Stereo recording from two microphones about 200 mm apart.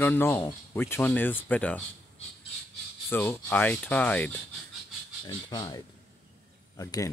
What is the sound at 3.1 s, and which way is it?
Speech, 10° left (ahead or behind).